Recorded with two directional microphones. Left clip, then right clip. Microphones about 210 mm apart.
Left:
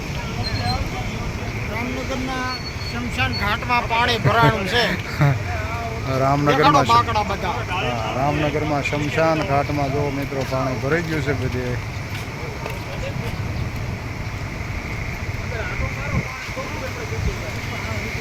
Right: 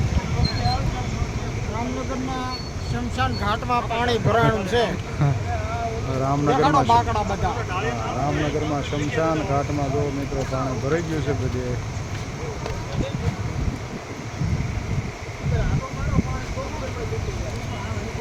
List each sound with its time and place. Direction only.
3.2 s speech: 25° right (ahead or behind)
5.2 s speech: 10° left (ahead or behind)
6.1 s speech: 20° left (ahead or behind)
6.5 s speech: 40° right (ahead or behind)
7.7 s speech: 35° left (ahead or behind)
8.4 s speech: 20° left (ahead or behind)